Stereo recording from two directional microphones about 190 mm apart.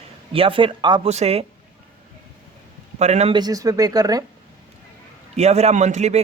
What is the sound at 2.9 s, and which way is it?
Speech, 35° right (ahead or behind).